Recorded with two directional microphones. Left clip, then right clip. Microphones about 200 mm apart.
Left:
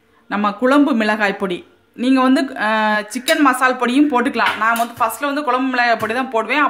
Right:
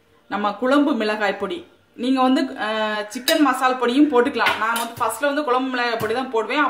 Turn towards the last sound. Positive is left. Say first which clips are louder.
# left 4 dB
turn(degrees=50)  # may be behind; listen again after turning